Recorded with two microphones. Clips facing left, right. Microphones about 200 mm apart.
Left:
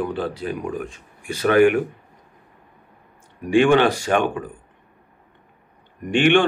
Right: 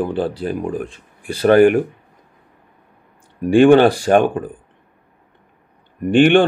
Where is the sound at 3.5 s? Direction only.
35° right (ahead or behind).